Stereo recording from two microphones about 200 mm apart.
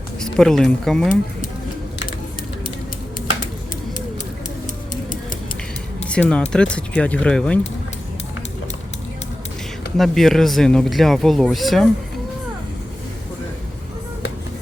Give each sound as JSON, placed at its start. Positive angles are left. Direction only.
{"t": 0.2, "sound": "speech", "side_deg": 5}
{"t": 6.1, "sound": "speech", "side_deg": 5}
{"t": 10.0, "sound": "speech", "side_deg": 0}